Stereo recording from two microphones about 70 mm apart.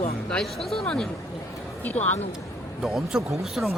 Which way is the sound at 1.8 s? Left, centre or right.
Left.